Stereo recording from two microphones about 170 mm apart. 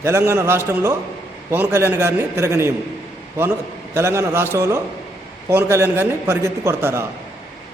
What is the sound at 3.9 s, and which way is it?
A man's voice, 15° right (ahead or behind).